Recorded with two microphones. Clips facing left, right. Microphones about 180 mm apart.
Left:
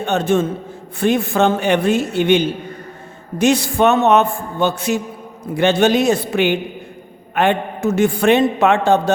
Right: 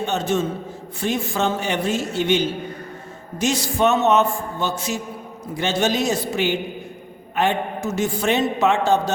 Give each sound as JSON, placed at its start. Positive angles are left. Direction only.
{"t": 0.0, "sound": "a man's voice", "side_deg": 60}